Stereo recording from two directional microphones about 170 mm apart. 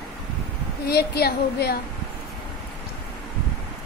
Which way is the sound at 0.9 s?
70° left (ahead or behind).